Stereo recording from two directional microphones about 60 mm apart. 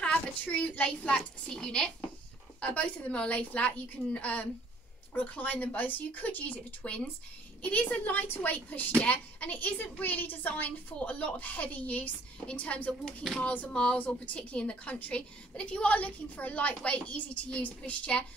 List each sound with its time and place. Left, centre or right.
0.0 s a woman's voice: left
2.6 s a woman's voice: left
13.0 s speech: centre
13.4 s a woman's voice: left